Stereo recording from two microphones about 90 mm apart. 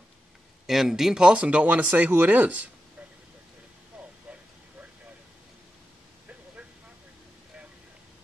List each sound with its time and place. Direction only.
0.7 s speech: 5° right (ahead or behind)